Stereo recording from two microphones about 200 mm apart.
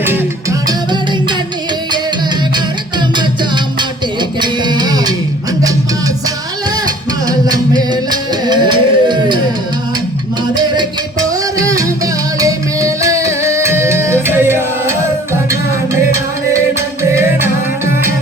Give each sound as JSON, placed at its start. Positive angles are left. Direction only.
{"t": 0.0, "sound": "music", "side_deg": -10}
{"t": 0.7, "sound": "music", "side_deg": -20}
{"t": 3.2, "sound": "music", "side_deg": -25}
{"t": 6.8, "sound": "music", "side_deg": -20}
{"t": 10.5, "sound": "music", "side_deg": -20}
{"t": 17.0, "sound": "music", "side_deg": -15}